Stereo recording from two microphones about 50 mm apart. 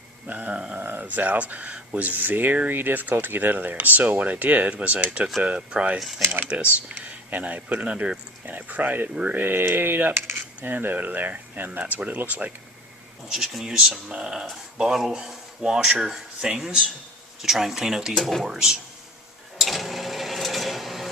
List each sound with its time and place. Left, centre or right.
0.3 s speech: right
0.8 s a sound: right
1.0 s speech: right
6.0 s speech: centre
6.2 s speech: right
6.8 s speech: right
8.4 s speech: right
9.4 s speech: right
13.2 s speech: centre
18.2 s speech: centre
18.4 s speech: centre
19.5 s sewing machine: centre